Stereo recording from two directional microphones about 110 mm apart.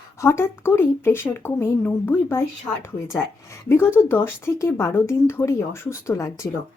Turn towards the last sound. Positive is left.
turn(degrees=25)  # may be behind; listen again after turning